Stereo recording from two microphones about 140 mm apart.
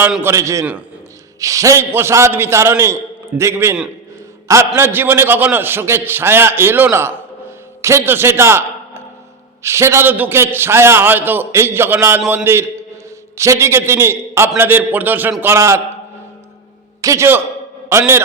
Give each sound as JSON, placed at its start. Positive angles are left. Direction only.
{"t": 0.2, "sound": "a man's voice", "side_deg": -20}
{"t": 17.0, "sound": "a man's voice", "side_deg": -20}